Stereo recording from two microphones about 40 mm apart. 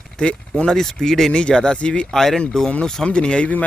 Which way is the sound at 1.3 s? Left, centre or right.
Left.